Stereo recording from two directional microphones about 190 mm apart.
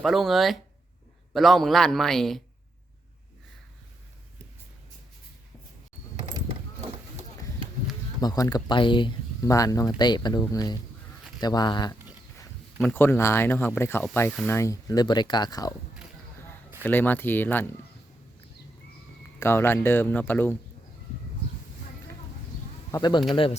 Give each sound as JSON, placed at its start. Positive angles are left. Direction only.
{"t": 0.0, "sound": "a man's voice", "side_deg": 0}
{"t": 8.2, "sound": "speech", "side_deg": 20}
{"t": 12.8, "sound": "speech", "side_deg": 10}
{"t": 16.8, "sound": "speech", "side_deg": 10}
{"t": 19.4, "sound": "speech", "side_deg": 15}
{"t": 22.9, "sound": "speech", "side_deg": 20}